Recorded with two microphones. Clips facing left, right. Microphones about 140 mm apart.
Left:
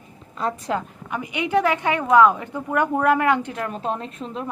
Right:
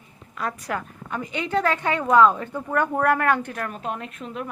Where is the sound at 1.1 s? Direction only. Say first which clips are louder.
Left 3 dB; 15° left (ahead or behind).